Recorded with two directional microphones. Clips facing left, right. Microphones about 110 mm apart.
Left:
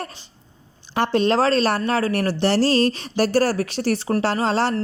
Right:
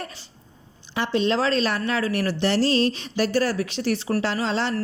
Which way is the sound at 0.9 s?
50° left (ahead or behind).